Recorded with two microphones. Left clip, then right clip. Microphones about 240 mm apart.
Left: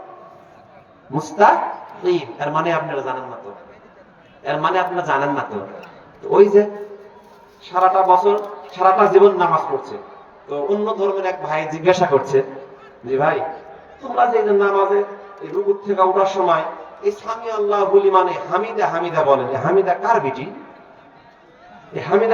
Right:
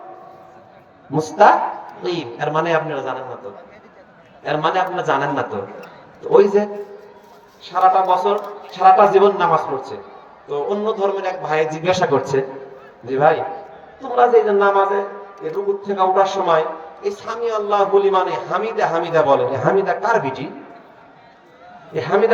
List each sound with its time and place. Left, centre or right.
1.1 s a man's voice: right
4.4 s a man's voice: right
21.9 s a man's voice: right